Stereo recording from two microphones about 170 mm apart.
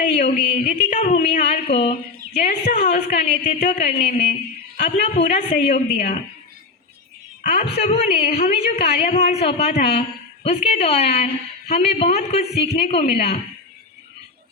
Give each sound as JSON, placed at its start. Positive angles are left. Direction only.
{"t": 0.0, "sound": "a woman's voice", "side_deg": 45}
{"t": 7.4, "sound": "a woman's voice", "side_deg": 40}